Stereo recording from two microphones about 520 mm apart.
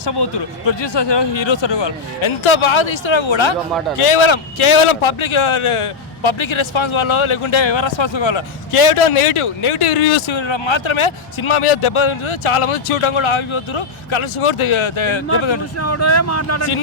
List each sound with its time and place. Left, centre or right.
0.0 s a man's voice: left
3.9 s a man's voice: left
15.8 s speech: left